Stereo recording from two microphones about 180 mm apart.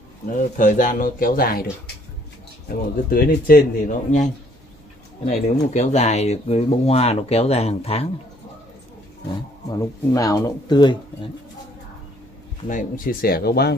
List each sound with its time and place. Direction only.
0.4 s speech: 45° left (ahead or behind)
3.1 s speech: 55° left (ahead or behind); by 8.1 s 35° left (ahead or behind)
9.7 s speech: 20° left (ahead or behind)
12.6 s speech: 45° left (ahead or behind); by 13.7 s 60° left (ahead or behind)